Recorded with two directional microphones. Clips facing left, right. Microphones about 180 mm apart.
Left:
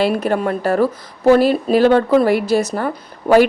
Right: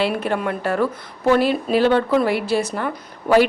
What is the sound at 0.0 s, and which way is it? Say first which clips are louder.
A woman's voice: left 4 dB; 40° left (ahead or behind).